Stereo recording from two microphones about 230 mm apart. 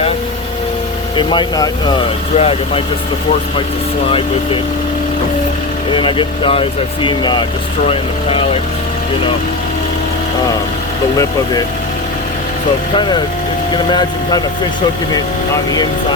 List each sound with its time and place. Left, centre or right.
1.1 s speech: centre
6.0 s speech: left
13.0 s speech: centre
15.7 s speech: centre